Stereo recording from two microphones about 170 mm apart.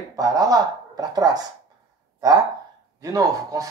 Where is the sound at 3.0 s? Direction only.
20° right (ahead or behind).